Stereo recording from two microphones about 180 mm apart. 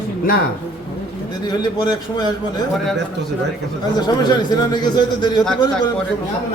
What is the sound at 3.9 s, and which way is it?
A man's voice, 25° left (ahead or behind).